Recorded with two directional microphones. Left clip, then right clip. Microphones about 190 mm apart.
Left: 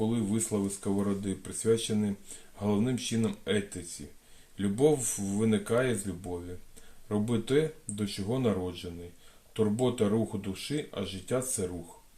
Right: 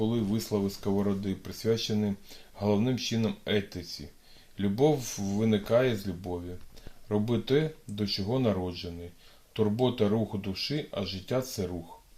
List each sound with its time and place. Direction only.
0.0 s speech: 40° right (ahead or behind)
4.8 s speech: 35° right (ahead or behind)